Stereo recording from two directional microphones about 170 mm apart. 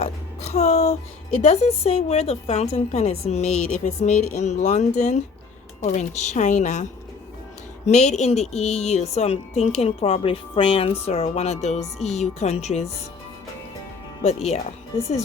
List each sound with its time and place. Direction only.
0.0 s a woman's voice: 40° left (ahead or behind)
7.9 s a woman's voice: 40° left (ahead or behind)
14.2 s speech: 40° left (ahead or behind)